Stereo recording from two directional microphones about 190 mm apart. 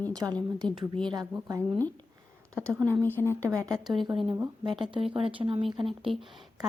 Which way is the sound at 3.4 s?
15° right (ahead or behind).